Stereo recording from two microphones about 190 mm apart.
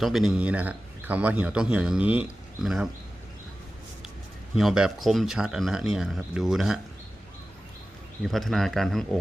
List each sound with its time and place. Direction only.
0.0 s a man's voice: centre (ahead or behind)
4.5 s speech: 5° right (ahead or behind)
8.3 s speech: centre (ahead or behind)